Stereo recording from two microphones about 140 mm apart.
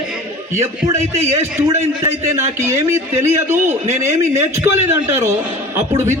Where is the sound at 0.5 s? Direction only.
20° right (ahead or behind).